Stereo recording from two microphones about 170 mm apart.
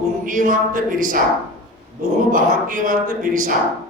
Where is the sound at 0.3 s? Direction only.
50° right (ahead or behind).